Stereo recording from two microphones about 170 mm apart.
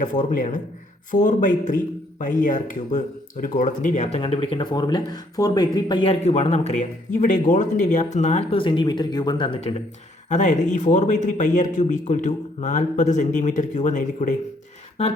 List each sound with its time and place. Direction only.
0.0 s speech: 50° left (ahead or behind)
4.2 s speech: 30° left (ahead or behind)
10.2 s speech: 45° left (ahead or behind)